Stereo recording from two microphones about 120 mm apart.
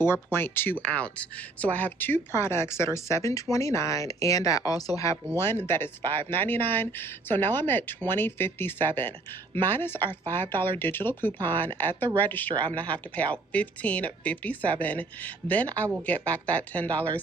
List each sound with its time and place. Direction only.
0.0 s a woman's voice: 20° left (ahead or behind)